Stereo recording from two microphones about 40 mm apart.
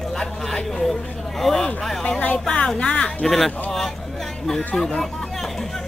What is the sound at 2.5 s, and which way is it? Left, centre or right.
Speech, left.